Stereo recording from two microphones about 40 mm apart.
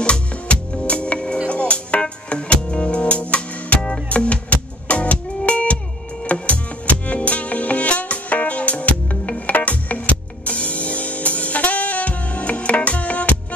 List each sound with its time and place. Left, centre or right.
0.0 s music: left